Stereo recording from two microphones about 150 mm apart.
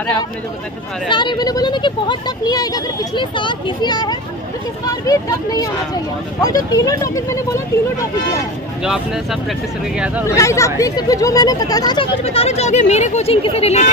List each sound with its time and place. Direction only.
1.0 s speech: 30° left (ahead or behind)
8.8 s speech: 5° right (ahead or behind)
10.3 s speech: 20° left (ahead or behind)
12.2 s speech: 40° left (ahead or behind)